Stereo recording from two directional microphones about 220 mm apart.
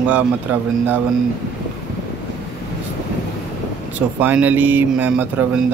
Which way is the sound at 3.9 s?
5° right (ahead or behind).